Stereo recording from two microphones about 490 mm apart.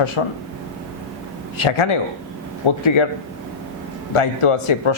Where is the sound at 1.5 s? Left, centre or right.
Left.